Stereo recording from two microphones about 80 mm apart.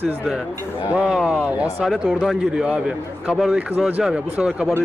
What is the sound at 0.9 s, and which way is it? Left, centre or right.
Speech, centre.